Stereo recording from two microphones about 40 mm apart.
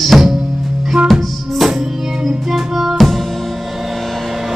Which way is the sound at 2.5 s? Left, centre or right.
Centre.